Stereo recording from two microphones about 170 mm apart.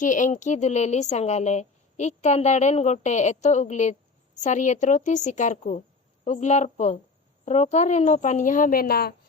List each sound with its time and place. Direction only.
0.0 s a woman's voice: 50° left (ahead or behind); by 9.1 s 65° left (ahead or behind)